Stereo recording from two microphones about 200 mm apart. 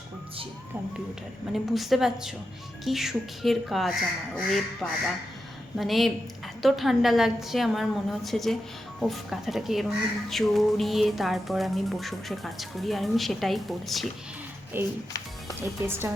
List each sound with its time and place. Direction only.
1.5 s music: centre (ahead or behind)
14.7 s a woman's voice: 10° right (ahead or behind)